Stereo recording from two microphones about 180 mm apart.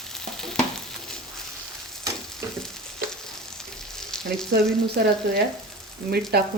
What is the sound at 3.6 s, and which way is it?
Frying, 5° left (ahead or behind).